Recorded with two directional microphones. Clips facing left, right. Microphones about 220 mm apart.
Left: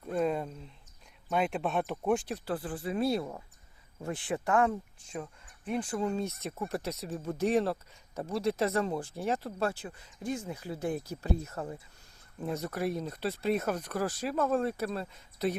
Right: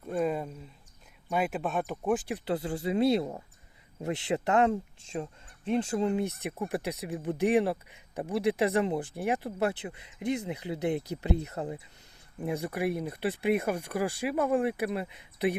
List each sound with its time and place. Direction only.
0.0 s a sound: 5° right (ahead or behind)
1.3 s speech: 5° right (ahead or behind)
2.3 s speech: 20° right (ahead or behind)